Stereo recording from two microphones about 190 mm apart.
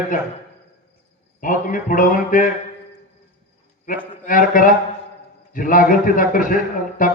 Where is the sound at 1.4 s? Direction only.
45° left (ahead or behind).